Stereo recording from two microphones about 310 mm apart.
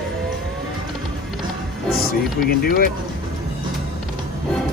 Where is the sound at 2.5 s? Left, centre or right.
Left.